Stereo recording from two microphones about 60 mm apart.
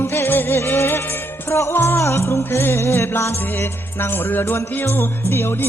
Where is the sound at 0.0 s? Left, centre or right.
Left.